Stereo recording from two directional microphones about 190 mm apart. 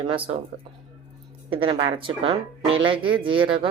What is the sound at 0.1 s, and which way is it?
Speech, 25° right (ahead or behind).